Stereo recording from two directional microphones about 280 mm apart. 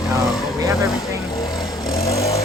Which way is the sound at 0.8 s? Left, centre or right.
Centre.